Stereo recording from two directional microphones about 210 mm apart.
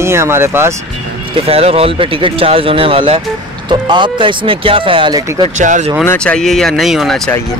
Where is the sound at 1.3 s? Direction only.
30° right (ahead or behind).